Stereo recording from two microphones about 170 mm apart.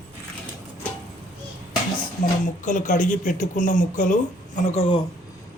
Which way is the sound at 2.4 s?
50° left (ahead or behind).